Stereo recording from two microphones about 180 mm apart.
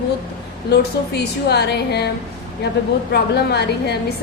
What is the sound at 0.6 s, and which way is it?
A woman's voice, 65° left (ahead or behind).